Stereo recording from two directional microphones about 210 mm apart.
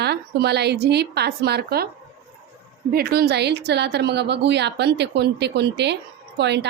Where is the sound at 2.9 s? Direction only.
45° right (ahead or behind).